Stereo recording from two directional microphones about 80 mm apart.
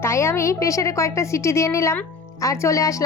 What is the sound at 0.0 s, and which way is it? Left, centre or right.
A woman's voice, left.